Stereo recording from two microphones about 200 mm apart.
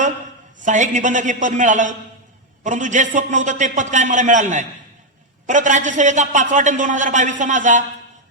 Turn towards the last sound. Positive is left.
turn(degrees=-40)  # may be behind; listen again after turning